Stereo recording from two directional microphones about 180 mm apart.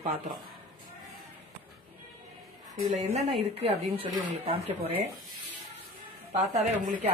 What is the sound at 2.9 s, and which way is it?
Speech, 40° right (ahead or behind).